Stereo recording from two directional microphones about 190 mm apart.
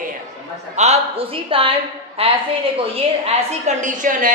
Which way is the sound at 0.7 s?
35° right (ahead or behind).